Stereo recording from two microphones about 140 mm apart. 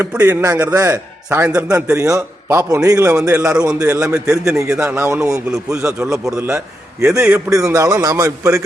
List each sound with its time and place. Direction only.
0.0 s a man's voice: 15° right (ahead or behind)
7.1 s a man's voice: 20° right (ahead or behind)